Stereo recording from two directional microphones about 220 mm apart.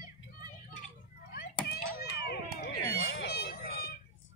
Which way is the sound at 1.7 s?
45° left (ahead or behind).